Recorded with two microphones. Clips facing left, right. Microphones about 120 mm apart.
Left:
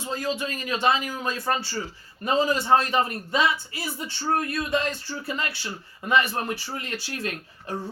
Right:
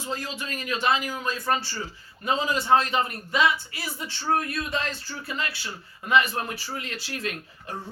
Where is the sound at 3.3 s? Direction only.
30° left (ahead or behind).